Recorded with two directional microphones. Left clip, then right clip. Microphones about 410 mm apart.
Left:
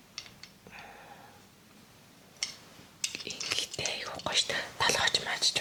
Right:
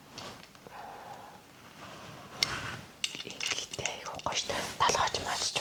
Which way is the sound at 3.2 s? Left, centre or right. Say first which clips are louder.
Left 1 dB; centre.